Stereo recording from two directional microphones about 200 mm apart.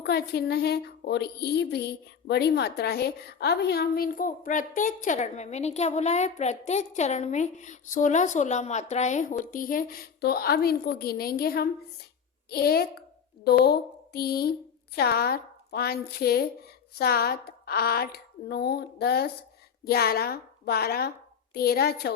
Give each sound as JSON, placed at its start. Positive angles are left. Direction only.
{"t": 0.0, "sound": "speech", "side_deg": 55}